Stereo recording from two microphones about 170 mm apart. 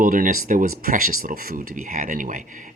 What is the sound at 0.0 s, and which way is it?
Speech, 55° right (ahead or behind).